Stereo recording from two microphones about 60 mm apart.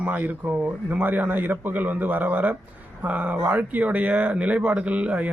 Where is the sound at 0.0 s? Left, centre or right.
Right.